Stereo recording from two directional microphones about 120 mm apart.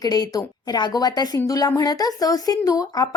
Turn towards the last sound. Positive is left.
turn(degrees=30)  # may be behind; listen again after turning